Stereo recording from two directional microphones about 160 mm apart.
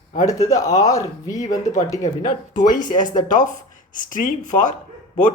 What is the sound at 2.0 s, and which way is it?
Speech, 60° left (ahead or behind).